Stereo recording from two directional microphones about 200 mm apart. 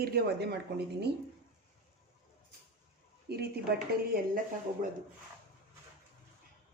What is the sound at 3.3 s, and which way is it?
A woman's voice, 55° right (ahead or behind).